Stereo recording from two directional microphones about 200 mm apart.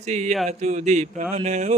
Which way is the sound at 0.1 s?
35° right (ahead or behind).